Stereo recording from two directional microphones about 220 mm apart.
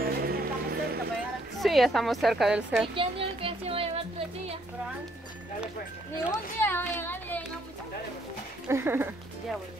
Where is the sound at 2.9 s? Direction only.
25° right (ahead or behind).